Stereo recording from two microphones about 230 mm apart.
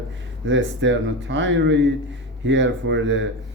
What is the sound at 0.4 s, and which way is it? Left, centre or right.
Speech, right.